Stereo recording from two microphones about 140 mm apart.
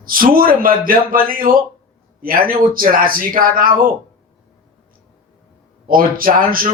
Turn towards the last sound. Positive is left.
turn(degrees=-85)